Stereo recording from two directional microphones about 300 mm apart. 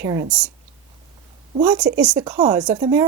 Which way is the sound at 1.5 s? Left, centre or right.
Centre.